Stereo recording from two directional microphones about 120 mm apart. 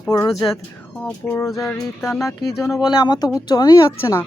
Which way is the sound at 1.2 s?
30° left (ahead or behind).